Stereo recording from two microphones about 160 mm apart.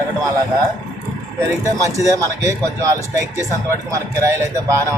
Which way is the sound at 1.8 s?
20° right (ahead or behind).